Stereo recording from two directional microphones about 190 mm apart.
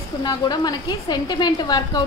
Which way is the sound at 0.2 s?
20° left (ahead or behind).